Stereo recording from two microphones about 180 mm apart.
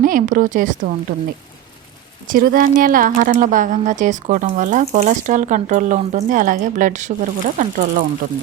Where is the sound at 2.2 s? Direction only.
50° right (ahead or behind).